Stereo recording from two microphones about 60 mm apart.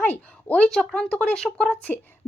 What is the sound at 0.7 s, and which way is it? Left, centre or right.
Speech, centre.